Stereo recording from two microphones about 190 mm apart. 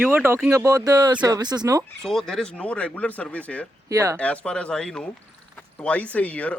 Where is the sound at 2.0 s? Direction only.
Centre (ahead or behind).